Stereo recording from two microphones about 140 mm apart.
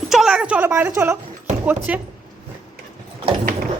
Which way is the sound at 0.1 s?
5° right (ahead or behind).